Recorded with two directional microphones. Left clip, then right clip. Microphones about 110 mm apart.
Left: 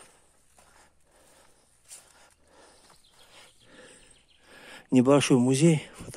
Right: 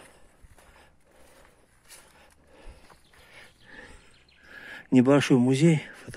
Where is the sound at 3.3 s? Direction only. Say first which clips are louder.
Right 5 dB; 25° left (ahead or behind).